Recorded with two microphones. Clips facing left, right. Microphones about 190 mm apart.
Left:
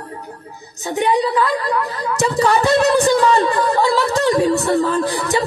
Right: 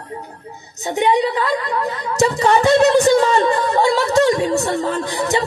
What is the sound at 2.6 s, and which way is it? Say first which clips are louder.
Music: right 4 dB; 35° left (ahead or behind).